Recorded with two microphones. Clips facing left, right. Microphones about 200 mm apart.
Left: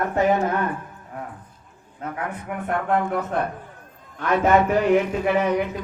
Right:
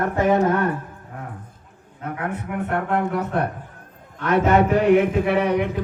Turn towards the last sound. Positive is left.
turn(degrees=-60)  # may be behind; listen again after turning